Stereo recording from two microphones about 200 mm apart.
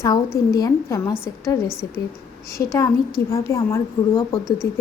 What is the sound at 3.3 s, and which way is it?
Speech, 15° left (ahead or behind).